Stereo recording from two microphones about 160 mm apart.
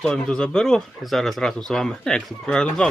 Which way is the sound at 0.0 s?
5° left (ahead or behind).